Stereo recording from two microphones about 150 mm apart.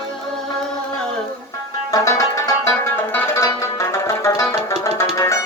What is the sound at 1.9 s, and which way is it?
Music, 20° left (ahead or behind).